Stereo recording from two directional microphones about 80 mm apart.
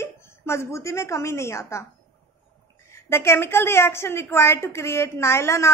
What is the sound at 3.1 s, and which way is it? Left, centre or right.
A woman's voice, left.